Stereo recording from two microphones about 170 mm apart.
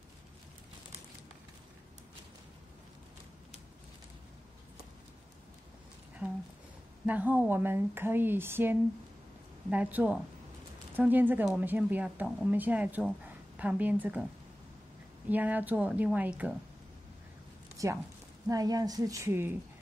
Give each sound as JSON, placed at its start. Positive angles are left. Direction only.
{"t": 7.1, "sound": "speech", "side_deg": -10}
{"t": 15.2, "sound": "speech", "side_deg": -10}
{"t": 17.8, "sound": "a woman's voice", "side_deg": -20}